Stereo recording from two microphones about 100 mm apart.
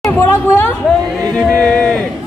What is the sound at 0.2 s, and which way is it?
Speech, 20° left (ahead or behind).